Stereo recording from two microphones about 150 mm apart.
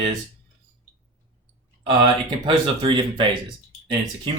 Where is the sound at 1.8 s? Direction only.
30° right (ahead or behind).